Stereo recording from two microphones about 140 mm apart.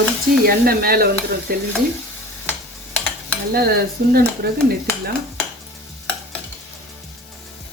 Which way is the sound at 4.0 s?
90° right.